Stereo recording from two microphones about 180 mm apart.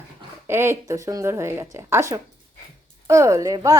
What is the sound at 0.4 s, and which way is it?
A woman's voice, 15° right (ahead or behind).